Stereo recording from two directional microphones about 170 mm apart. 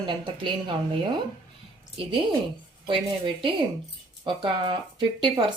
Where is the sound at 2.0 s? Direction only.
30° right (ahead or behind).